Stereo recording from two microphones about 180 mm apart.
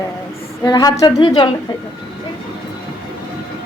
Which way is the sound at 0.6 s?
20° left (ahead or behind).